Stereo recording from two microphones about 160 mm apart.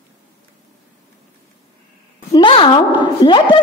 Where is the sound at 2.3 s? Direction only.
30° left (ahead or behind).